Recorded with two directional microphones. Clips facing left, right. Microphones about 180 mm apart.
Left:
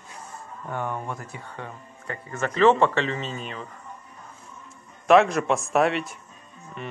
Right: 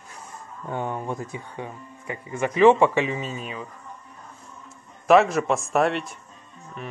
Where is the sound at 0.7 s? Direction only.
15° right (ahead or behind).